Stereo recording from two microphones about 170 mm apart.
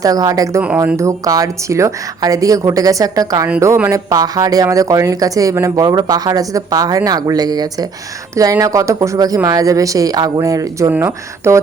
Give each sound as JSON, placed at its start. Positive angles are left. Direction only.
{"t": 0.0, "sound": "speech", "side_deg": -20}